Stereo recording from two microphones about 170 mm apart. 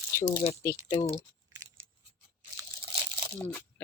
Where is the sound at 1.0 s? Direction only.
35° left (ahead or behind).